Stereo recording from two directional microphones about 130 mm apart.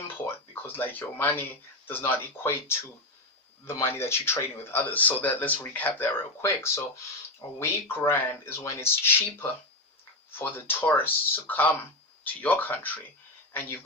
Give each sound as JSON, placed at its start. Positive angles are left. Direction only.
{"t": 0.6, "sound": "speech", "side_deg": 15}